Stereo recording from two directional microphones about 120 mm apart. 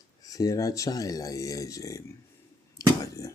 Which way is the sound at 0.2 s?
30° left (ahead or behind).